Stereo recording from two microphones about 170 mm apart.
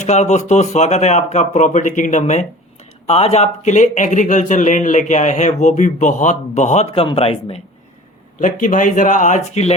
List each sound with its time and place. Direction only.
0.0 s speech: 40° left (ahead or behind)
8.4 s speech: 50° left (ahead or behind)